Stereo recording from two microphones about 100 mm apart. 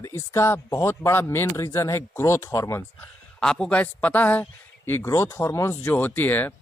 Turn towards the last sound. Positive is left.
turn(degrees=20)  # may be behind; listen again after turning